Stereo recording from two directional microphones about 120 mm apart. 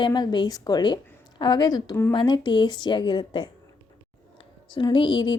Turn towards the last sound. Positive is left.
turn(degrees=40)  # may be behind; listen again after turning